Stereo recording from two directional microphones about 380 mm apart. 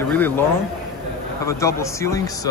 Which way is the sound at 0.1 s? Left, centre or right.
Centre.